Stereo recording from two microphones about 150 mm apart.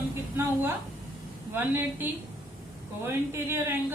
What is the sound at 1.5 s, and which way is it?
Speech, 15° right (ahead or behind).